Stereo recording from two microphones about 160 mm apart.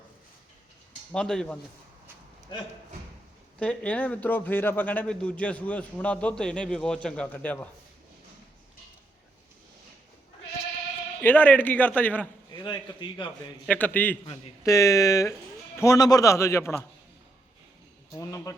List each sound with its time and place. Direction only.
1.1 s speech: 5° left (ahead or behind)
3.6 s speech: 10° left (ahead or behind)
11.2 s speech: 10° left (ahead or behind)
12.6 s a man's voice: 30° left (ahead or behind)
13.7 s speech: 10° left (ahead or behind)
14.6 s a man's voice: 20° left (ahead or behind)
18.1 s a man's voice: 20° left (ahead or behind)